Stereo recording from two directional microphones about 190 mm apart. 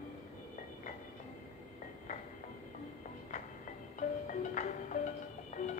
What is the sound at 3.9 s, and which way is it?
Music, 40° left (ahead or behind).